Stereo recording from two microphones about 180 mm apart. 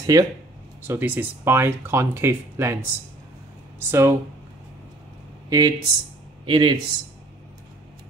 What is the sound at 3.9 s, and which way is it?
Speech, 15° right (ahead or behind).